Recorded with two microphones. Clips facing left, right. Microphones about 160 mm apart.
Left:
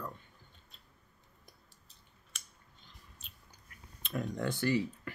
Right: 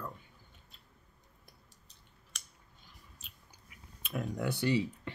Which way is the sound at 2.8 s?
5° right (ahead or behind).